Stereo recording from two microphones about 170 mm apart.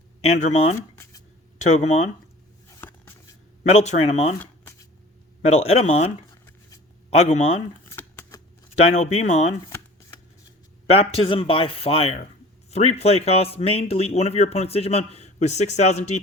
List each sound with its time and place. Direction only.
0.3 s speech: 45° left (ahead or behind)
2.6 s a sound: 15° left (ahead or behind)
3.7 s speech: 40° left (ahead or behind)
5.5 s speech: 40° left (ahead or behind)
7.1 s speech: 40° left (ahead or behind)
7.9 s shuffling cards: 15° left (ahead or behind)
8.7 s speech: 40° left (ahead or behind)
9.6 s shuffling cards: 15° left (ahead or behind)
10.9 s speech: 35° left (ahead or behind)